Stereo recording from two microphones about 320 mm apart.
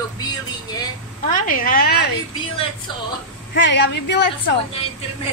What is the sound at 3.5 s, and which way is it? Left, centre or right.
Speech, left.